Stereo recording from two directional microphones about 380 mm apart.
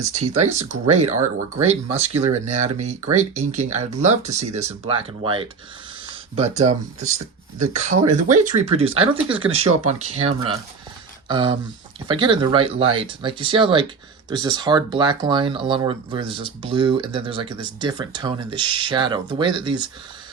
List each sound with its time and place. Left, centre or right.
0.0 s speech: centre